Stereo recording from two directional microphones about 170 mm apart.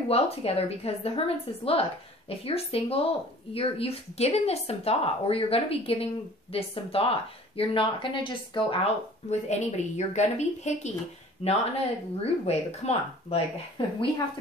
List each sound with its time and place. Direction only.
0.1 s a woman's voice: 35° left (ahead or behind)